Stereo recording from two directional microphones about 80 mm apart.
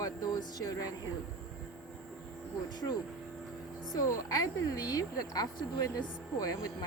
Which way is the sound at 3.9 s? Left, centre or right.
Left.